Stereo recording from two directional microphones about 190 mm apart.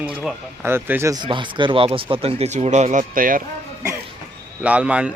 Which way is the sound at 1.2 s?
25° right (ahead or behind).